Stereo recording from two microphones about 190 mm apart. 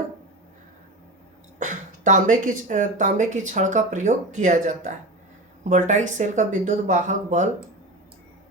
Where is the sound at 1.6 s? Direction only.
40° right (ahead or behind).